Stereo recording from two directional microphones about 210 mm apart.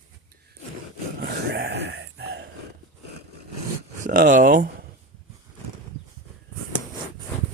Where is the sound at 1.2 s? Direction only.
50° right (ahead or behind).